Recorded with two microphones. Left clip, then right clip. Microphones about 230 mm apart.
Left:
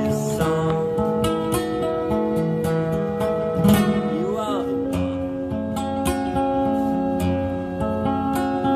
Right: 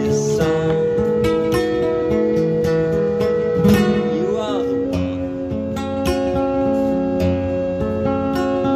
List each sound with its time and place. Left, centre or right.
3.6 s music: left